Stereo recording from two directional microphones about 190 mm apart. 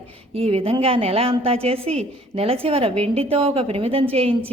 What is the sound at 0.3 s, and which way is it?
A woman's voice, 30° right (ahead or behind).